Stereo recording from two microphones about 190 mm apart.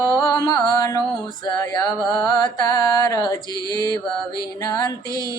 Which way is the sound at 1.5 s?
20° left (ahead or behind).